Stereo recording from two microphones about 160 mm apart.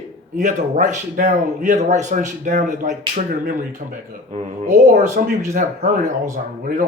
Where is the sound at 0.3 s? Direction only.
50° right (ahead or behind).